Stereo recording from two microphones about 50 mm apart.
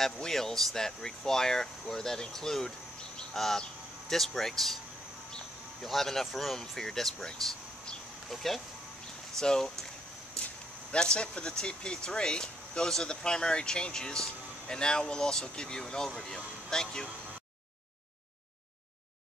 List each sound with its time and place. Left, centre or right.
0.0 s speech: centre
3.2 s a sound: centre
4.1 s speech: centre
5.8 s speech: centre
10.9 s speech: centre